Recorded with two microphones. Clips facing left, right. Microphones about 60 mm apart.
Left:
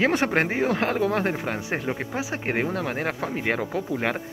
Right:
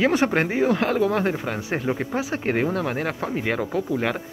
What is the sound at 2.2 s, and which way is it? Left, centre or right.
Speech, centre.